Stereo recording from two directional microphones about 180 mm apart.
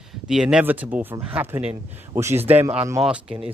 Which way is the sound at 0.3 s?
5° right (ahead or behind).